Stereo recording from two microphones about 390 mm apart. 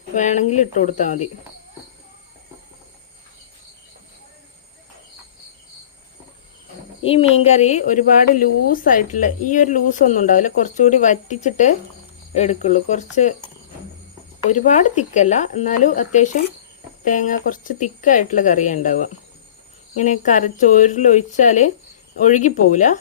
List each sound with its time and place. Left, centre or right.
0.1 s speech: centre
7.0 s speech: centre
14.5 s speech: centre